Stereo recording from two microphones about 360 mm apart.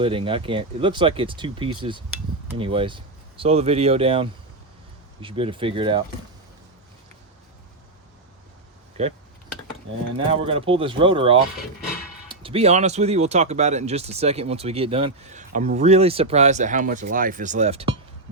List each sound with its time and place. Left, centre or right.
0.0 s speech: centre
9.0 s speech: centre
10.2 s speech: centre